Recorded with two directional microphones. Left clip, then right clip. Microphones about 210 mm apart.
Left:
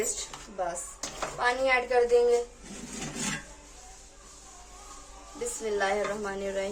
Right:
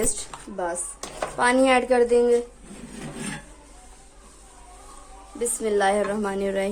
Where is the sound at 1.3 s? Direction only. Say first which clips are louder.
Right 7 dB; 55° right (ahead or behind).